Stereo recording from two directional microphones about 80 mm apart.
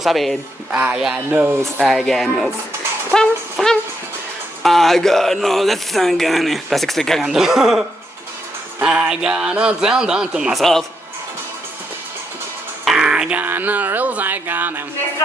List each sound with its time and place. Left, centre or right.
0.0 s speech: centre
0.7 s speech: centre
0.9 s a man's voice: centre
1.3 s speech: right
1.6 s speech: centre
3.2 s music: centre
4.6 s speech: centre
8.8 s a man's voice: centre
10.6 s speech: centre
12.8 s speech: centre; by 14.8 s right